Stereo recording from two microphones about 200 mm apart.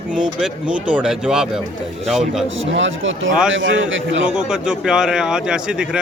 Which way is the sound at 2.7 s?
70° right (ahead or behind).